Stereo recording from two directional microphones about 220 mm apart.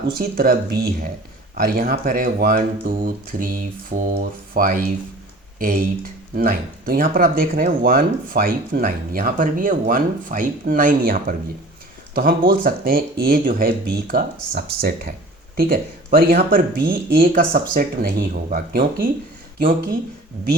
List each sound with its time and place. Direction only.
0.2 s speech: 45° right (ahead or behind)
12.5 s speech: 40° right (ahead or behind)